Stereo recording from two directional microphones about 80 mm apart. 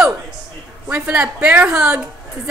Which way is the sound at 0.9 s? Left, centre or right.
Right.